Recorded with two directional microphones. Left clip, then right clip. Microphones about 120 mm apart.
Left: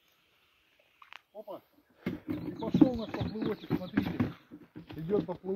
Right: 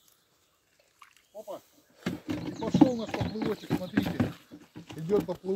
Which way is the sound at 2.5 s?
45° right (ahead or behind).